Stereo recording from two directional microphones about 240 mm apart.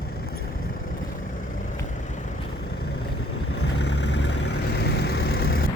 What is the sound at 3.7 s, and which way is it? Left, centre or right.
Vehicle, left.